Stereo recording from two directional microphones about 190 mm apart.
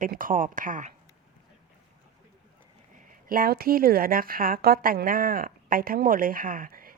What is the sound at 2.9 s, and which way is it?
A woman's voice, 50° right (ahead or behind).